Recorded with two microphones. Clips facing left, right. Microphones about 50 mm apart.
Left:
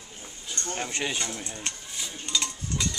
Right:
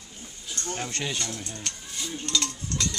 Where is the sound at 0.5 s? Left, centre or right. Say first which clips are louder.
Even; centre.